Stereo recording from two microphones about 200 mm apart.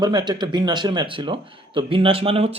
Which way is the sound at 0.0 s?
20° right (ahead or behind).